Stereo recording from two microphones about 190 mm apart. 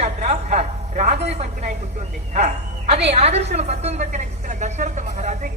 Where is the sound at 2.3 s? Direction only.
40° right (ahead or behind).